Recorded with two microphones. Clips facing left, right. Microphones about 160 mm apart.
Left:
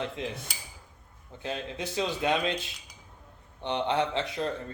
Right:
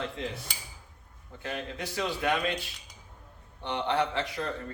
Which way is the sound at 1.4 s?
20° left (ahead or behind).